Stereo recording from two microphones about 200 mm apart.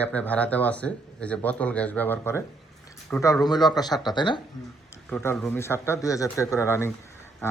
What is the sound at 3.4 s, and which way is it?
Speech, 20° left (ahead or behind).